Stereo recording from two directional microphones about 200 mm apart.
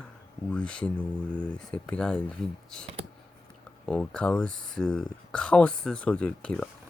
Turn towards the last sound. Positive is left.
turn(degrees=5)  # may be behind; listen again after turning